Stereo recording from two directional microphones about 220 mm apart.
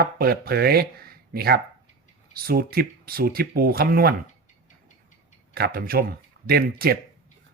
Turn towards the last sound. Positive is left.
turn(degrees=-45)  # may be behind; listen again after turning